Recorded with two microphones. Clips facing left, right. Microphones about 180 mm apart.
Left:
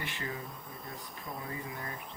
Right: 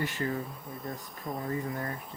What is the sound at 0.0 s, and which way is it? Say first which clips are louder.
Speech: right 8 dB; 40° right (ahead or behind).